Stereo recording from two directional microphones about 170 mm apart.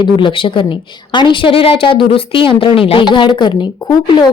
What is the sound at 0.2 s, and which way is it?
A woman's voice, 30° left (ahead or behind).